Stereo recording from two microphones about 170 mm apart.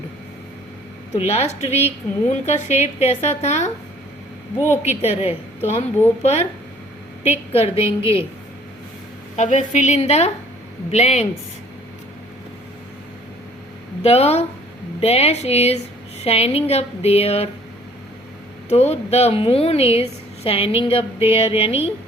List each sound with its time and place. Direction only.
1.1 s a woman's voice: 40° left (ahead or behind)
4.8 s a woman's voice: 40° left (ahead or behind)
7.5 s a woman's voice: 35° left (ahead or behind)
9.3 s a woman's voice: 45° left (ahead or behind)
14.0 s a woman's voice: 40° left (ahead or behind)
18.7 s a woman's voice: 40° left (ahead or behind)